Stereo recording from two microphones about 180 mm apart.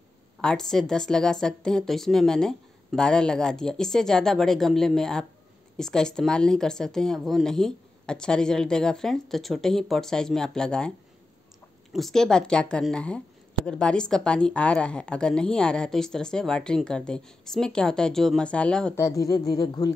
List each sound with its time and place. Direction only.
0.4 s a woman's voice: 5° left (ahead or behind)
11.9 s a woman's voice: centre (ahead or behind)
18.9 s speech: 20° left (ahead or behind)